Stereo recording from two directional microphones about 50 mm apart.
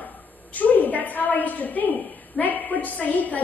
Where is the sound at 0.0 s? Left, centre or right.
Left.